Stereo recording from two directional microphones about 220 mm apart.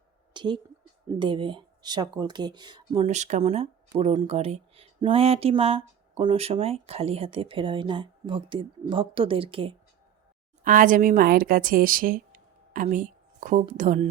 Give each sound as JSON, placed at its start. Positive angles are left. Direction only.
{"t": 0.3, "sound": "a woman's voice", "side_deg": -20}
{"t": 10.6, "sound": "speech", "side_deg": -40}